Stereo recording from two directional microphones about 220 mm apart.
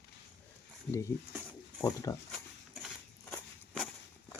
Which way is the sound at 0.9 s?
15° left (ahead or behind).